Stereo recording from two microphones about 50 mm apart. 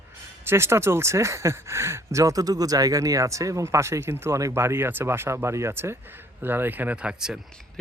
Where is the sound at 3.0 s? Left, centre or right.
Right.